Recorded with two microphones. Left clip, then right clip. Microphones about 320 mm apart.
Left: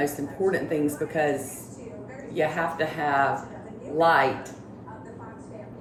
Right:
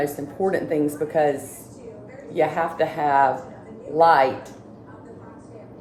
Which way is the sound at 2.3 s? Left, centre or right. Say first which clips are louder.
Right 4 dB; centre.